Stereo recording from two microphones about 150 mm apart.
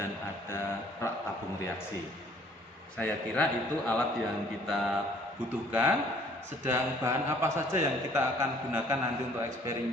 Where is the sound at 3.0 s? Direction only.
10° left (ahead or behind).